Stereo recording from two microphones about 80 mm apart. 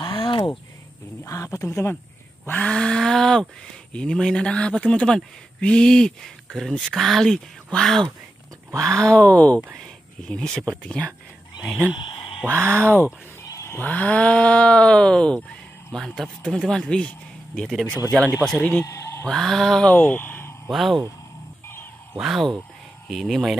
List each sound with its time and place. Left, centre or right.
0.0 s a sound: left
1.2 s speech: left
2.4 s speech: centre
12.4 s speech: right
13.5 s a sound: left
13.7 s speech: left
18.6 s speech: centre
18.9 s mantra: left
19.2 s speech: centre
19.9 s speech: left
20.7 s speech: centre
22.2 s speech: centre